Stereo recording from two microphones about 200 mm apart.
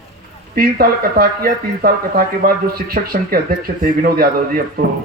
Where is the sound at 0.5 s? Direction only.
45° right (ahead or behind).